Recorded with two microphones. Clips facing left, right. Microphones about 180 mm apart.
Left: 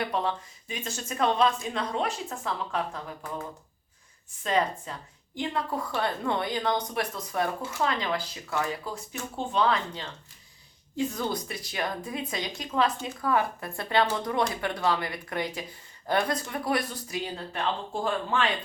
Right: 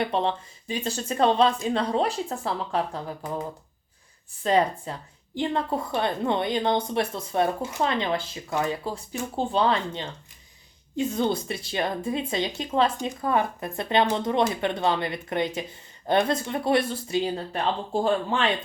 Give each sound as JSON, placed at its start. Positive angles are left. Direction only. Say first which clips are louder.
{"t": 0.0, "sound": "speech", "louder": "right 4 dB", "side_deg": -25}
{"t": 4.4, "sound": "a woman's voice", "louder": "right 5 dB", "side_deg": -30}